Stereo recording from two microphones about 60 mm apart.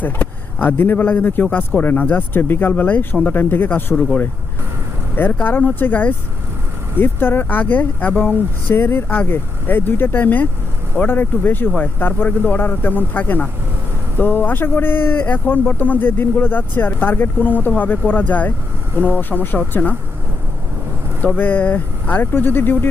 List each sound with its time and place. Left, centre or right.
0.0 s speech: left
3.9 s speech: centre
5.1 s speech: left
21.3 s speech: left